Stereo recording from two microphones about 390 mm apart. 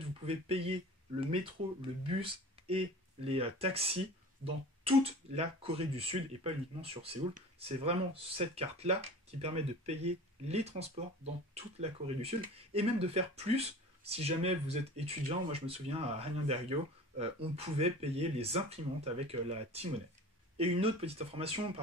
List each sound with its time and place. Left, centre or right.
0.5 s speech: centre